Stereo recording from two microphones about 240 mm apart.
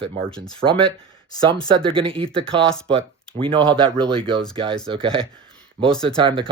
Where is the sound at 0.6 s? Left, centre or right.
Right.